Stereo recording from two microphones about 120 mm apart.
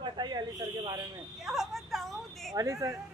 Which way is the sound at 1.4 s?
Centre (ahead or behind).